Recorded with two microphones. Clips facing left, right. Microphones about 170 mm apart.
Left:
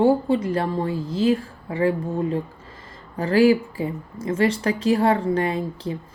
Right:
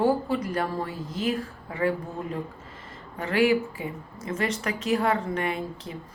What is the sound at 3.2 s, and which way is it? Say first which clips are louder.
A woman's voice: left 6 dB; 35° left (ahead or behind).